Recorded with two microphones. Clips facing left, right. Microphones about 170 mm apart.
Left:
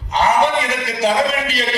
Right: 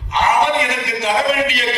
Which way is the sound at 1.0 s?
35° left (ahead or behind).